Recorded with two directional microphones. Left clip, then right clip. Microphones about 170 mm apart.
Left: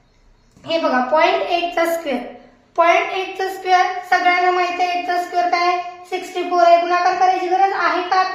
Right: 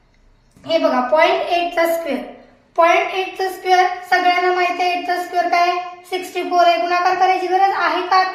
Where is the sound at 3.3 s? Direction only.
20° left (ahead or behind); by 7.1 s 5° left (ahead or behind).